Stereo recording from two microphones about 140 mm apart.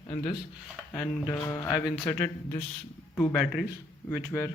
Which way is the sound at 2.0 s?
15° left (ahead or behind).